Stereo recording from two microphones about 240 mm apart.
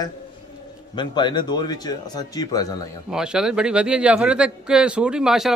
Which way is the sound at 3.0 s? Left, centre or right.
Centre.